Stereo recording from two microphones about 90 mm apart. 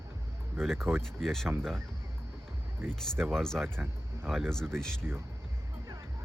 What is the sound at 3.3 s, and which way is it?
Speech, 5° left (ahead or behind).